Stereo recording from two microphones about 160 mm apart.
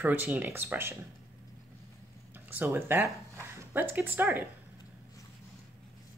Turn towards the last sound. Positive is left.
turn(degrees=-15)  # may be behind; listen again after turning